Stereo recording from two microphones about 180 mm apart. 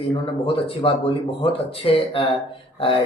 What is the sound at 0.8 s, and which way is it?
A man's voice, 30° left (ahead or behind).